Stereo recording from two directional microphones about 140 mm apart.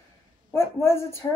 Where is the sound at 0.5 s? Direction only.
20° left (ahead or behind).